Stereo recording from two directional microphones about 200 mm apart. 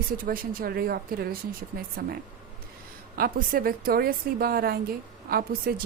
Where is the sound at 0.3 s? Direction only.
50° right (ahead or behind).